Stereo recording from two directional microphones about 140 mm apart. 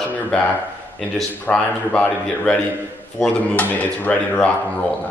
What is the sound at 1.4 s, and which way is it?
Speech, 5° left (ahead or behind).